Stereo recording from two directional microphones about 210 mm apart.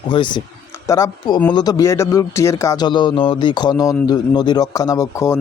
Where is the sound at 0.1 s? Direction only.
20° left (ahead or behind).